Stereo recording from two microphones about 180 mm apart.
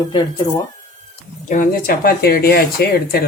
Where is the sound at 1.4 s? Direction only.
50° left (ahead or behind).